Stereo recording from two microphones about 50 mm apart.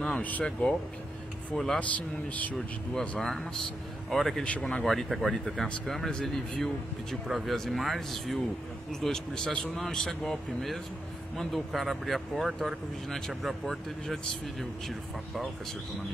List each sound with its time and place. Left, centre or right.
0.0 s speech: left
1.5 s a man's voice: centre
1.8 s speech: left
3.2 s a man's voice: centre
4.5 s speech: left
4.8 s speech: centre
7.2 s speech: centre
9.0 s a man's voice: centre